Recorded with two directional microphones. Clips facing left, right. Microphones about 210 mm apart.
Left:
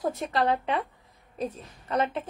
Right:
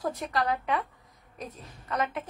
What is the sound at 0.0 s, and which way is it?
A woman's voice, 25° left (ahead or behind).